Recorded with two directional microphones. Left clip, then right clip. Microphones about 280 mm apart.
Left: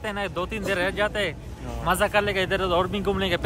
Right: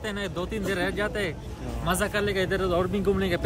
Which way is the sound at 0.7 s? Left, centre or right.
Centre.